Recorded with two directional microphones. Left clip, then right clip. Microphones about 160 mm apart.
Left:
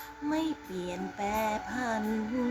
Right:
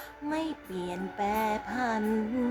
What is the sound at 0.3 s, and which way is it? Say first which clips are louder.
Music: left 1 dB; 15° right (ahead or behind).